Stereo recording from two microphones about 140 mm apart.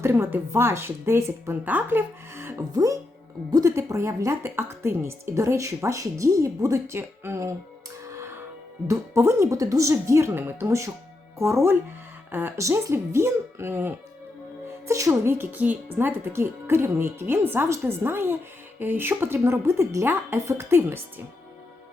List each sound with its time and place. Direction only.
0.0 s speech: 15° right (ahead or behind)
8.9 s speech: 20° right (ahead or behind)